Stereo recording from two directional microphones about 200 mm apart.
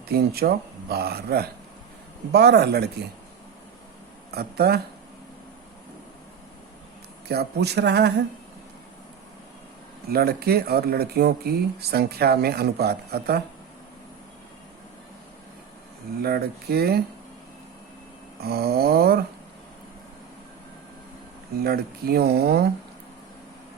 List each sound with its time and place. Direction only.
0.1 s speech: 50° right (ahead or behind)
4.3 s speech: 50° right (ahead or behind)
7.3 s speech: 55° right (ahead or behind)
10.1 s speech: 50° right (ahead or behind)
16.2 s speech: 50° right (ahead or behind)
18.4 s speech: 50° right (ahead or behind)
21.6 s speech: 50° right (ahead or behind)